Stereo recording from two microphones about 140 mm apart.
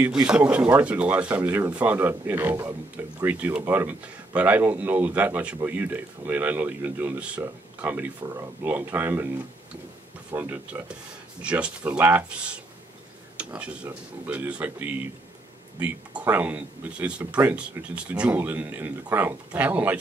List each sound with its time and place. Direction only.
0.3 s speech: 10° right (ahead or behind)
10.3 s speech: 10° right (ahead or behind)